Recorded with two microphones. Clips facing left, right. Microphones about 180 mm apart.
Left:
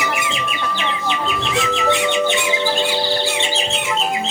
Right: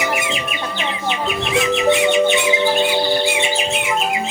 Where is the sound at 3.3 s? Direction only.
10° right (ahead or behind).